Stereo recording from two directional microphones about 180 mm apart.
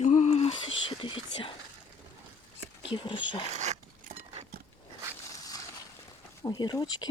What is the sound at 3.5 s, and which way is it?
Speech, 40° right (ahead or behind).